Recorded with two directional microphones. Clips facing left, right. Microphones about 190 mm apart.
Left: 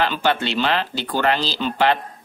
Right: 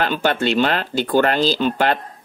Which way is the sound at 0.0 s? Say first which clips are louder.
Right 2 dB; 50° right (ahead or behind).